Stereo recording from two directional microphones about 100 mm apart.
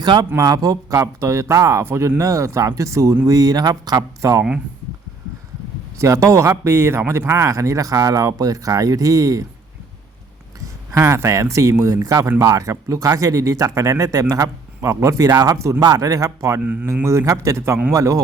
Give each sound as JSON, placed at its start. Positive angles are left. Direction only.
{"t": 0.0, "sound": "speech", "side_deg": -45}
{"t": 0.4, "sound": "speech", "side_deg": -35}
{"t": 6.0, "sound": "speech", "side_deg": -30}
{"t": 10.9, "sound": "speech", "side_deg": -30}